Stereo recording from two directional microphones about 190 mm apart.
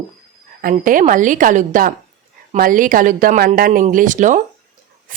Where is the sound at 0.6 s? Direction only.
45° right (ahead or behind).